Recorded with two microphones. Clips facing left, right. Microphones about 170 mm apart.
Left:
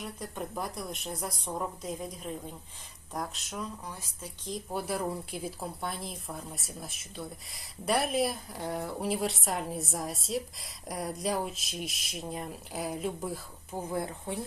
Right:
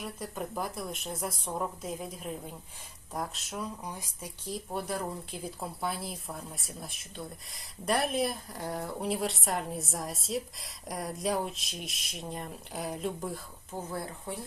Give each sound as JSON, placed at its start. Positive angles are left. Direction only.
{"t": 0.0, "sound": "speech", "side_deg": 0}
{"t": 4.9, "sound": "speech", "side_deg": 5}
{"t": 13.9, "sound": "speech", "side_deg": 20}